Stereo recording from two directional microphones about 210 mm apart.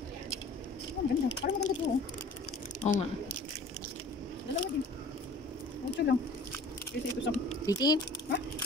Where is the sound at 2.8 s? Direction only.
30° left (ahead or behind).